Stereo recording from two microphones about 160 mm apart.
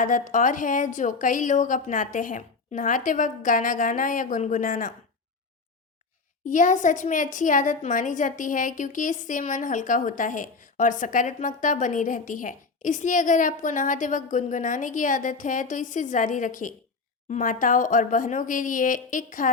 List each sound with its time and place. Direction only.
0.0 s a woman's voice: 55° left (ahead or behind)
6.5 s a woman's voice: 55° left (ahead or behind)